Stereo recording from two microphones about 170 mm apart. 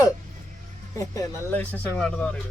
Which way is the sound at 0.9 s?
20° left (ahead or behind).